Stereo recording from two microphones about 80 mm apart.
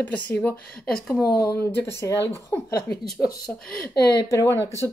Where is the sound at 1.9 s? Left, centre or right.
Left.